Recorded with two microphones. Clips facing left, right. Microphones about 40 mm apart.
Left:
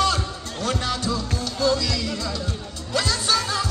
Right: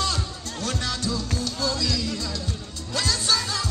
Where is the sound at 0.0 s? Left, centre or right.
Left.